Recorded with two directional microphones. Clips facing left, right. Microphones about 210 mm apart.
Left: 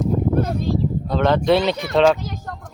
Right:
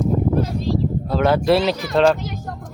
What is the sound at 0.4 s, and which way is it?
Speech, 55° left (ahead or behind).